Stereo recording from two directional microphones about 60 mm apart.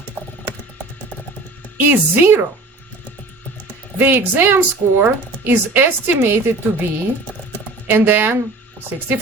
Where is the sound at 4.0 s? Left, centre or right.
Right.